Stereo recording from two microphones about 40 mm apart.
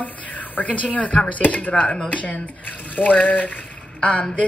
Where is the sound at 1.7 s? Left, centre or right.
Centre.